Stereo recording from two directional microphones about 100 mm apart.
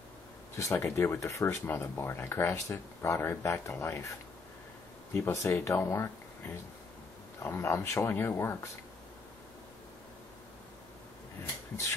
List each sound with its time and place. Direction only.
0.6 s speech: 30° left (ahead or behind)
5.1 s speech: 30° left (ahead or behind)